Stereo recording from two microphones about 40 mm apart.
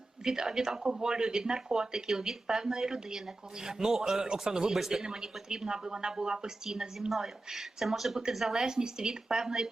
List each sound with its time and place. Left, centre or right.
0.3 s speech: centre
8.6 s speech: centre